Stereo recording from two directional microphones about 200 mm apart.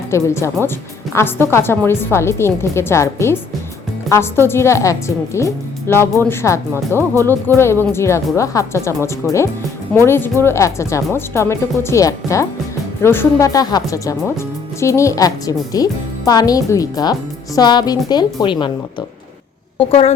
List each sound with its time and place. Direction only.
0.1 s speech: 15° left (ahead or behind); by 20.1 s 30° left (ahead or behind)